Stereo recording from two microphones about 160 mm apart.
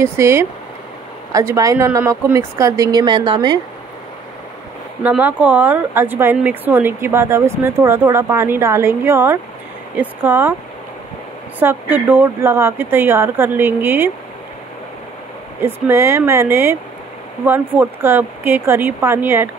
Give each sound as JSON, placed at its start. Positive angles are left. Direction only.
{"t": 0.0, "sound": "a woman's voice", "side_deg": -15}
{"t": 5.0, "sound": "speech", "side_deg": -10}
{"t": 11.6, "sound": "speech", "side_deg": -10}
{"t": 15.6, "sound": "speech", "side_deg": -15}